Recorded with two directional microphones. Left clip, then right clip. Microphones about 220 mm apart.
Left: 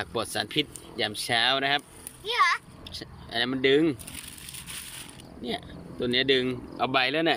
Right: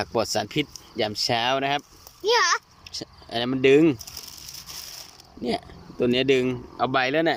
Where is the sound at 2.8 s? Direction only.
10° right (ahead or behind).